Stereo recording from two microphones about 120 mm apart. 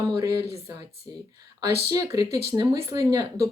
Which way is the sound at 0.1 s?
30° right (ahead or behind).